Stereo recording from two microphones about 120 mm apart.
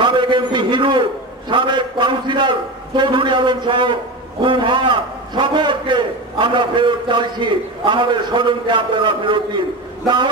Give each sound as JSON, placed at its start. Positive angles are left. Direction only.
{"t": 0.0, "sound": "a man's voice", "side_deg": -40}